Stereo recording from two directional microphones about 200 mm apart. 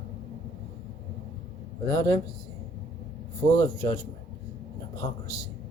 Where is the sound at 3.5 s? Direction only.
15° left (ahead or behind).